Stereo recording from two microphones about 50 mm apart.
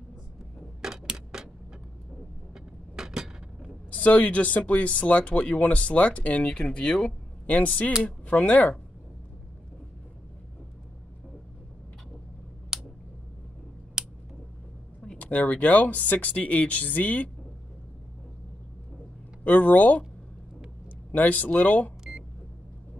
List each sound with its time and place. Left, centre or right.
0.8 s tick-tock: centre
2.5 s vehicle: centre
3.9 s speech: left
7.4 s speech: left
12.7 s a sound: centre
14.0 s a sound: centre
15.0 s a sound: left
15.2 s speech: left
19.4 s speech: left
21.1 s speech: left